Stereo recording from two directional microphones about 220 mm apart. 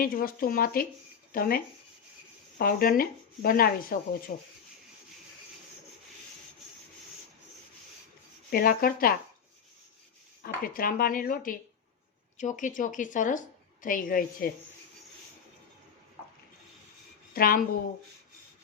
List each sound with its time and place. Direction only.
0.0 s speech: 40° left (ahead or behind)
8.4 s speech: 40° left (ahead or behind)
10.4 s speech: 40° left (ahead or behind)
17.3 s a woman's voice: 40° left (ahead or behind)